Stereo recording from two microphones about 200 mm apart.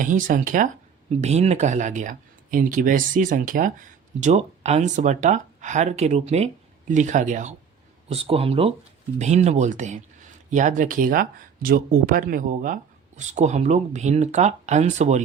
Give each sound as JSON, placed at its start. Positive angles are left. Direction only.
{"t": 0.0, "sound": "speech", "side_deg": -40}